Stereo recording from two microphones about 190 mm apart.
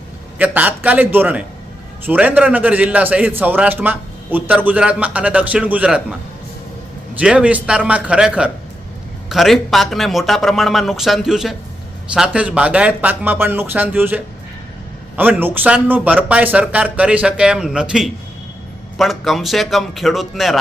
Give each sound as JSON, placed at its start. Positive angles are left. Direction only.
{"t": 0.3, "sound": "a man's voice", "side_deg": -10}
{"t": 7.2, "sound": "a man's voice", "side_deg": -5}